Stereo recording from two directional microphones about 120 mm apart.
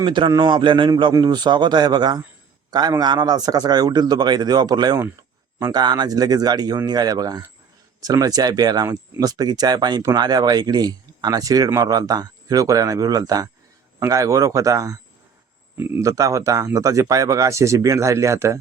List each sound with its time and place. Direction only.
0.0 s a man's voice: 45° right (ahead or behind); by 18.6 s 25° right (ahead or behind)